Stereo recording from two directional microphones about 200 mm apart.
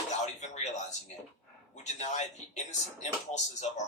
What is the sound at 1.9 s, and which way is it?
Speech, 35° left (ahead or behind).